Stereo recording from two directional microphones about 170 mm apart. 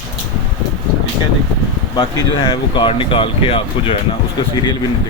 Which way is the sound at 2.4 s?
30° left (ahead or behind).